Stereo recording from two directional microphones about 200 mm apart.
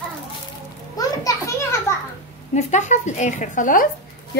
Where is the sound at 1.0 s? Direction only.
15° left (ahead or behind).